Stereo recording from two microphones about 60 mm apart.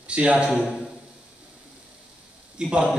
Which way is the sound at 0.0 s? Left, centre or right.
Right.